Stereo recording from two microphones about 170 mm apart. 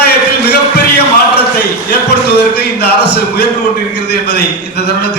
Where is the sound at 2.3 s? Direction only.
70° left (ahead or behind).